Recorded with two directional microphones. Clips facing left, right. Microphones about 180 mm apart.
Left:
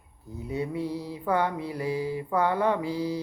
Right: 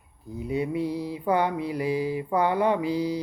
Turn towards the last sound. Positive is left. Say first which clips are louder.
# right 3 dB
turn(degrees=-15)  # may be behind; listen again after turning